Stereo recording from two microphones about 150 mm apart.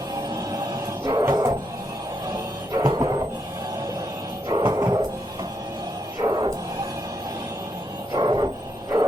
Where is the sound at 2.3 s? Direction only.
25° right (ahead or behind).